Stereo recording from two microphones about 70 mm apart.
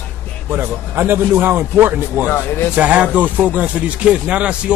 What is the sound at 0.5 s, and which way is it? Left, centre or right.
Speech, right.